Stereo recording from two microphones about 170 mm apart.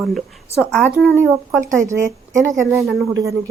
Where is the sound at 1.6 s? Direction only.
15° right (ahead or behind).